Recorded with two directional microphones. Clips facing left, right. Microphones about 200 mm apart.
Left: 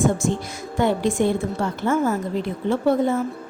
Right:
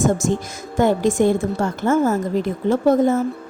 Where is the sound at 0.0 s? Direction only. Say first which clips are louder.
Right 2 dB; 45° right (ahead or behind).